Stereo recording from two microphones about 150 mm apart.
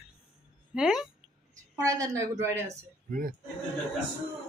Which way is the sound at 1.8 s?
25° right (ahead or behind).